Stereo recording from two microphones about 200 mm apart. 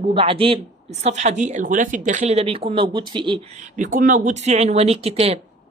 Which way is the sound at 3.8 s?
40° right (ahead or behind).